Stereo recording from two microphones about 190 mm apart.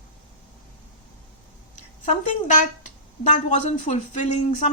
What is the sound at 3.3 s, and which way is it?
Speech, 40° left (ahead or behind).